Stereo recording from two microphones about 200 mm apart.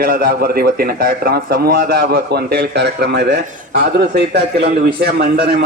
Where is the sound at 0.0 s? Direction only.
50° right (ahead or behind).